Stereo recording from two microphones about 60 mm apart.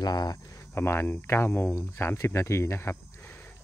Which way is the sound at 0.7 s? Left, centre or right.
Left.